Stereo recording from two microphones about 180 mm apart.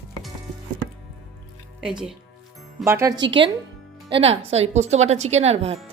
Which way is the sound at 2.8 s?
15° right (ahead or behind).